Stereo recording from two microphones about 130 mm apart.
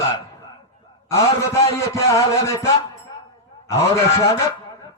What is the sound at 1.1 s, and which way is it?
A man's voice, 20° left (ahead or behind).